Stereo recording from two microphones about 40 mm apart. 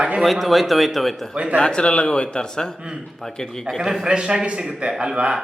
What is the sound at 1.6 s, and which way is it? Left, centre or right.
A man's voice, left.